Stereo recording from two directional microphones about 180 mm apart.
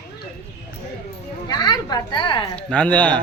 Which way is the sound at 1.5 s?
25° left (ahead or behind).